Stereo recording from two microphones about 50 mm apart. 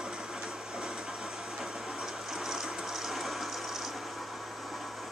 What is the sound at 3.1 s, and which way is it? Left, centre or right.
Ratchet, centre.